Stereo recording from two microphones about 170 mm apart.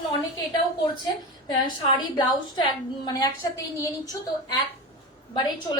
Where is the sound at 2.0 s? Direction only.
25° left (ahead or behind).